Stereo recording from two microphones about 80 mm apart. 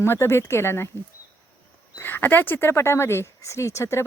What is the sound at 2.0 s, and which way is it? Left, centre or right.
Speech, left.